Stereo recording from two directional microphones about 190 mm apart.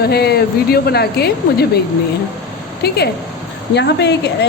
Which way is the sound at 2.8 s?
60° left (ahead or behind).